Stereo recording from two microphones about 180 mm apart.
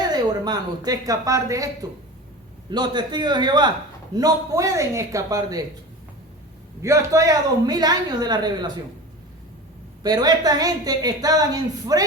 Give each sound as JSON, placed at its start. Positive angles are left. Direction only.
{"t": 0.1, "sound": "a woman's voice", "side_deg": -20}
{"t": 6.8, "sound": "a woman's voice", "side_deg": -15}
{"t": 10.0, "sound": "a woman's voice", "side_deg": -20}